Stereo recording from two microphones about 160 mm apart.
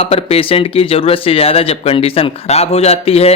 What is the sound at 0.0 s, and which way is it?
Speech, 40° left (ahead or behind).